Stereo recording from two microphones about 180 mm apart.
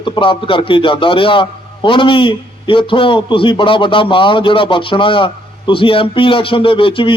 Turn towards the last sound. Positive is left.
turn(degrees=30)  # may be behind; listen again after turning